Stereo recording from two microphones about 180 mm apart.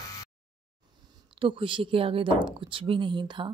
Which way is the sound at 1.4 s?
30° right (ahead or behind).